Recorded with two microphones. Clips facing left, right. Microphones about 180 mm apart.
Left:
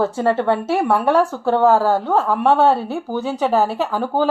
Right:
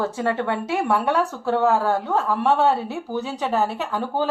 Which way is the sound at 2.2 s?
75° left (ahead or behind).